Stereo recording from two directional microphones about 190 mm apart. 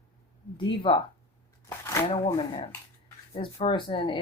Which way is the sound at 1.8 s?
15° left (ahead or behind).